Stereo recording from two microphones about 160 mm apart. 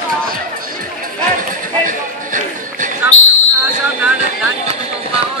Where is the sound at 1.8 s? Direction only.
55° right (ahead or behind).